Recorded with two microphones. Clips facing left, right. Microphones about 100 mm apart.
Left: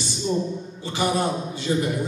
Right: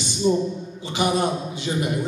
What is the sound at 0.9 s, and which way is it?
A man's voice, 15° right (ahead or behind).